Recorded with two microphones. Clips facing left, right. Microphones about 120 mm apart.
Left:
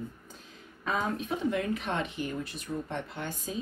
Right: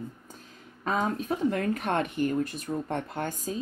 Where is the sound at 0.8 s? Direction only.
45° right (ahead or behind).